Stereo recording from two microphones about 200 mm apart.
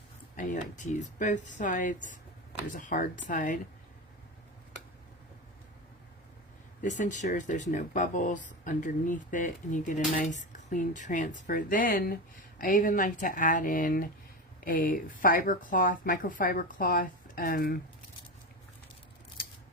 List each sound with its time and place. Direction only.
0.3 s speech: 40° left (ahead or behind)
6.8 s speech: 40° left (ahead or behind)